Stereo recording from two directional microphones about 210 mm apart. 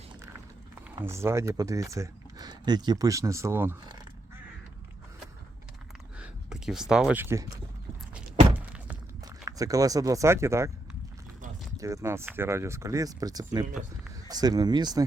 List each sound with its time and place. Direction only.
1.0 s speech: 10° right (ahead or behind)
6.1 s a sound: 5° right (ahead or behind)
9.2 s speech: 15° right (ahead or behind)
11.8 s speech: 15° right (ahead or behind)